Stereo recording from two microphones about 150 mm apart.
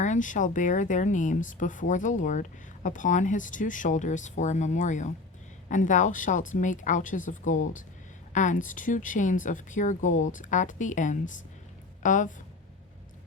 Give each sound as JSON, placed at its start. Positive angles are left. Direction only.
{"t": 0.0, "sound": "speech", "side_deg": 55}